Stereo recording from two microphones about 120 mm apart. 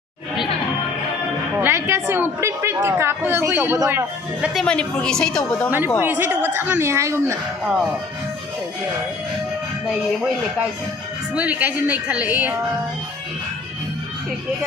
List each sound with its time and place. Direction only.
1.6 s a woman's voice: 20° right (ahead or behind)
4.6 s a woman's voice: 10° left (ahead or behind)
5.9 s a woman's voice: 15° right (ahead or behind)
11.3 s a woman's voice: 10° right (ahead or behind)